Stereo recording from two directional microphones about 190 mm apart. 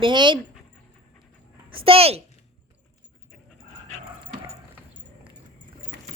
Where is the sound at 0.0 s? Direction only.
25° right (ahead or behind).